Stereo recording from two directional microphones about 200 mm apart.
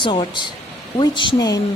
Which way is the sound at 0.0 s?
25° left (ahead or behind).